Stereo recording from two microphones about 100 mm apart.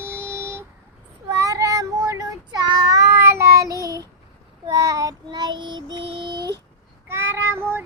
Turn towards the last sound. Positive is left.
turn(degrees=-20)  # may be behind; listen again after turning